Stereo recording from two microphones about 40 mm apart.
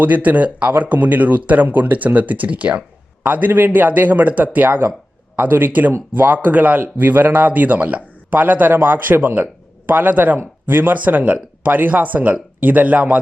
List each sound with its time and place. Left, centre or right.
0.0 s speech: right
3.2 s speech: right
8.4 s a man's voice: right
10.9 s speech: right